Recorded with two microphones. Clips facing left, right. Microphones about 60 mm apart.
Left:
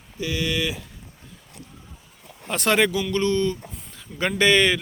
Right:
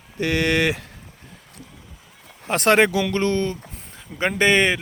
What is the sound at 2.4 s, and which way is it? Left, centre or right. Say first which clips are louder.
Speech: right 4 dB; right.